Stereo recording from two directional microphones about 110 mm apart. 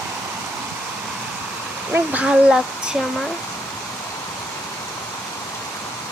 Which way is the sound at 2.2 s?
5° right (ahead or behind).